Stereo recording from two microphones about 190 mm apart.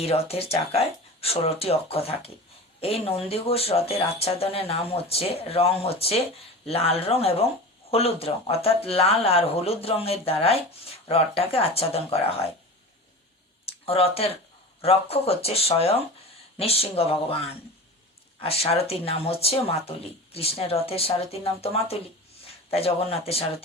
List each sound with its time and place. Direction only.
0.0 s speech: 30° left (ahead or behind)
13.7 s a sound: 30° left (ahead or behind)
14.8 s speech: 30° left (ahead or behind)
18.4 s speech: 30° left (ahead or behind)